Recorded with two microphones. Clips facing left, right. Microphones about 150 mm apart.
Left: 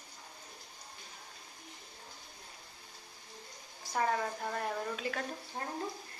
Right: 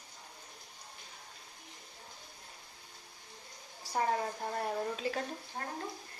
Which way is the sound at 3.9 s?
35° right (ahead or behind).